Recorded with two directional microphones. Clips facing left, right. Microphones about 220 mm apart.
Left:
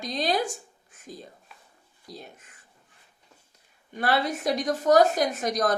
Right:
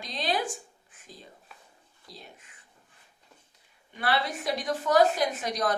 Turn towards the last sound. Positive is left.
turn(degrees=45)  # may be behind; listen again after turning